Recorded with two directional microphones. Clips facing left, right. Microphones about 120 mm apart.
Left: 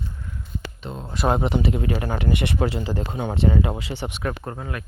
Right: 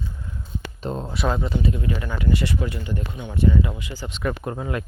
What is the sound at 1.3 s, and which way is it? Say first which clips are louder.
Speech: left 3 dB; 70° left (ahead or behind).